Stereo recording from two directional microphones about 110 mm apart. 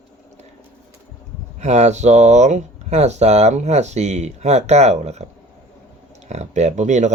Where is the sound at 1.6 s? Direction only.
90° right.